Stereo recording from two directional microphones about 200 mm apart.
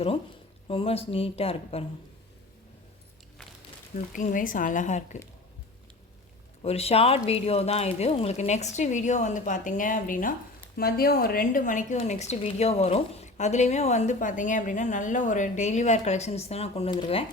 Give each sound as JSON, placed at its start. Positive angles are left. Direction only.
{"t": 0.7, "sound": "speech", "side_deg": 30}
{"t": 3.9, "sound": "a woman's voice", "side_deg": 40}
{"t": 6.6, "sound": "a woman's voice", "side_deg": 30}